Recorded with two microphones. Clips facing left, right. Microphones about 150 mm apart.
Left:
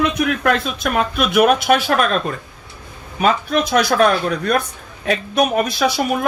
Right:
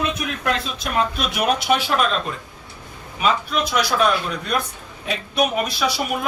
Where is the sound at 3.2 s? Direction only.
50° left (ahead or behind).